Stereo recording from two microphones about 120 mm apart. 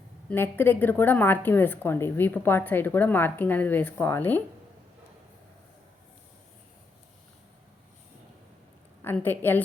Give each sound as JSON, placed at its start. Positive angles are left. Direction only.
{"t": 0.3, "sound": "a woman's voice", "side_deg": 15}
{"t": 9.2, "sound": "a woman's voice", "side_deg": 15}